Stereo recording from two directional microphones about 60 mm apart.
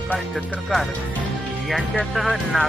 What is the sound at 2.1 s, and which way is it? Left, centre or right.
Speech, centre.